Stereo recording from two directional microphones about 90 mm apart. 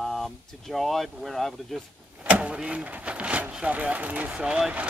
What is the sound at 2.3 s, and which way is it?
Speech, 10° right (ahead or behind).